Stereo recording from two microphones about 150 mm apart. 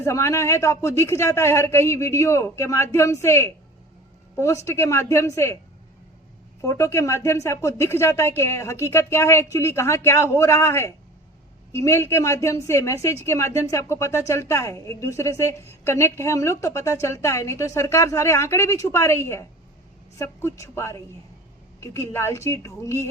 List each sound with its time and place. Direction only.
0.0 s a woman's voice: 20° left (ahead or behind)
6.6 s a woman's voice: 20° left (ahead or behind)